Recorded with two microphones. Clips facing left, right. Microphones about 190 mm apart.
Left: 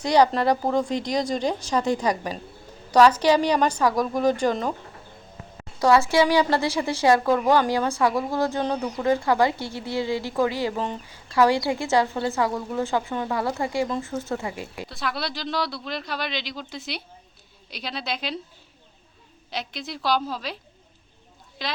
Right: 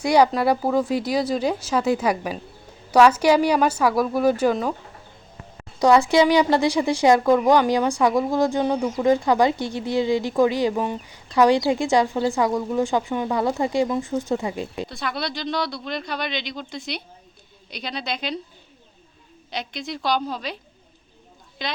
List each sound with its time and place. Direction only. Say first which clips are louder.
0.0 s a woman's voice: right 2 dB; 10° right (ahead or behind)
5.8 s a woman's voice: right 3 dB; 15° right (ahead or behind)
14.8 s speech: right 1 dB; centre (ahead or behind)
19.5 s speech: right 2 dB; centre (ahead or behind)
21.6 s speech: right 1 dB; centre (ahead or behind)